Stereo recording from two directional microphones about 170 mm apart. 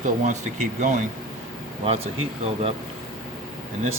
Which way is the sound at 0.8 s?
45° right (ahead or behind).